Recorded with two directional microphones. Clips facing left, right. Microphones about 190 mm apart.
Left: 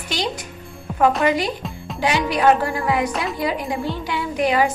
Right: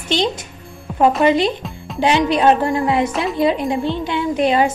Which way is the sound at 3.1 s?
Centre (ahead or behind).